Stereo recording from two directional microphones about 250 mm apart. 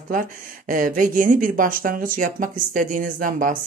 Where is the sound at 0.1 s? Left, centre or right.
Right.